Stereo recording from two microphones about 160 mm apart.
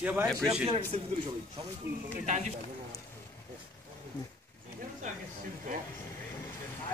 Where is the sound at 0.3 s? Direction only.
5° left (ahead or behind).